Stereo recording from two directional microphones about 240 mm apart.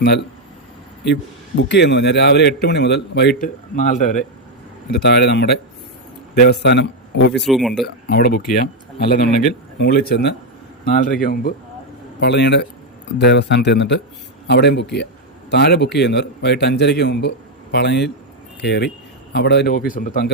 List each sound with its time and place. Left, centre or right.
0.0 s a man's voice: left
3.4 s speech: left
4.9 s a man's voice: left
7.3 s speech: centre
8.0 s a man's voice: left